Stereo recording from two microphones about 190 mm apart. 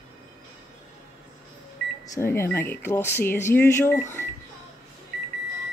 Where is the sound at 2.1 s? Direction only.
15° left (ahead or behind).